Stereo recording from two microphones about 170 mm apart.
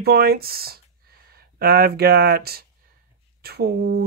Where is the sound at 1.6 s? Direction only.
65° right (ahead or behind).